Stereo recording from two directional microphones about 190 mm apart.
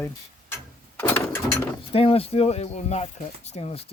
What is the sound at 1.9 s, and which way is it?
Speech, 30° left (ahead or behind).